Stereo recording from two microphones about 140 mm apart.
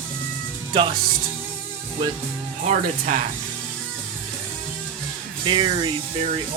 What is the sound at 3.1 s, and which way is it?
Speech, 70° right (ahead or behind).